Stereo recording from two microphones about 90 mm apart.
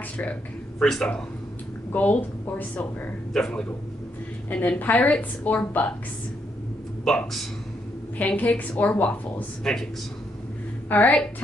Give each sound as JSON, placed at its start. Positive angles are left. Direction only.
{"t": 0.2, "sound": "a woman's voice", "side_deg": 15}
{"t": 1.9, "sound": "a woman's voice", "side_deg": 20}
{"t": 3.3, "sound": "a woman's voice", "side_deg": 5}
{"t": 4.5, "sound": "a woman's voice", "side_deg": 20}
{"t": 7.1, "sound": "a man's voice", "side_deg": 5}
{"t": 9.6, "sound": "a man's voice", "side_deg": 5}
{"t": 10.9, "sound": "a woman's voice", "side_deg": 15}